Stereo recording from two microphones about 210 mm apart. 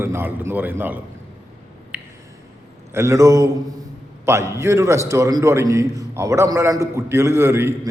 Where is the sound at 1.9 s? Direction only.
5° right (ahead or behind).